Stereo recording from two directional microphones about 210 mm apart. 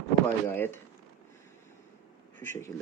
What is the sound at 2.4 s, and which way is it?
Speech, 10° left (ahead or behind).